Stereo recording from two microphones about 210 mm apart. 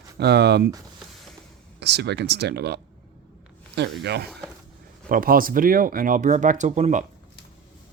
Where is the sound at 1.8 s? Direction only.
55° right (ahead or behind); by 7.1 s 35° right (ahead or behind).